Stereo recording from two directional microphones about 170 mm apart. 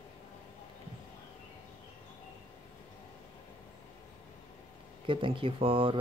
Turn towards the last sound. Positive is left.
turn(degrees=-30)  # may be behind; listen again after turning